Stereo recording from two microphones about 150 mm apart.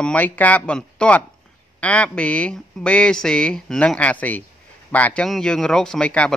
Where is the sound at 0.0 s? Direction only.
10° left (ahead or behind).